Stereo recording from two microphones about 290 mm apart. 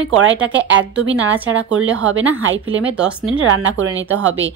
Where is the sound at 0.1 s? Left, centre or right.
Right.